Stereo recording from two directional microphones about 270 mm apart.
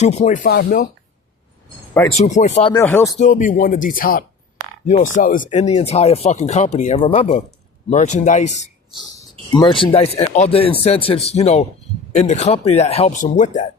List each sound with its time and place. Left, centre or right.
0.0 s speech: left
2.1 s speech: left
2.7 s speech: centre
3.2 s speech: left